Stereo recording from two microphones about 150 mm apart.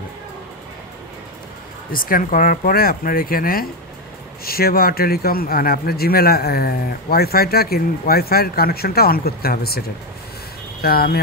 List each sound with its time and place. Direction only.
1.9 s speech: 70° left (ahead or behind)
4.5 s speech: 90° left